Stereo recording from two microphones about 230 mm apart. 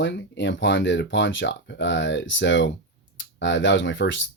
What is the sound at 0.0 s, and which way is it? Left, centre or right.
Speech, left.